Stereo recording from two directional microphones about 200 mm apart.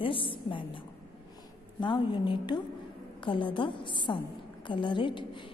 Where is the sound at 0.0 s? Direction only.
25° left (ahead or behind).